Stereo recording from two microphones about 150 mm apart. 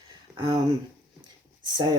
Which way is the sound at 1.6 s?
30° right (ahead or behind).